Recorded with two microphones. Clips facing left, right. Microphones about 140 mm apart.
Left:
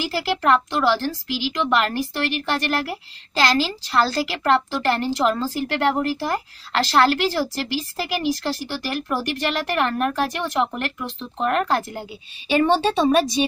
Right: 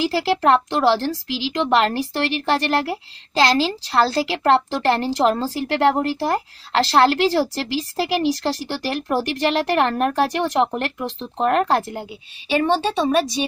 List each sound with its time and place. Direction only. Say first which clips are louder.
0.0 s speech: right 4 dB; 30° right (ahead or behind)
12.6 s speech: left 2 dB; centre (ahead or behind)